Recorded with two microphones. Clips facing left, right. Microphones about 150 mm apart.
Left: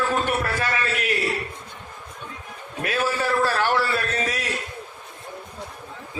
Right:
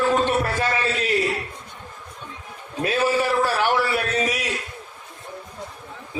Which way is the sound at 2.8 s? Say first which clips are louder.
Right 4 dB; 20° right (ahead or behind).